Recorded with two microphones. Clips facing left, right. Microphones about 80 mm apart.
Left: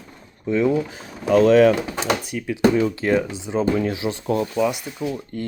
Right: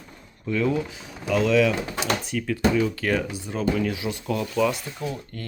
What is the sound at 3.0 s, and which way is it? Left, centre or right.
Speech, left.